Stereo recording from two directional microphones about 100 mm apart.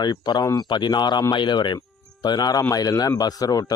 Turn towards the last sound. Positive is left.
turn(degrees=40)  # may be behind; listen again after turning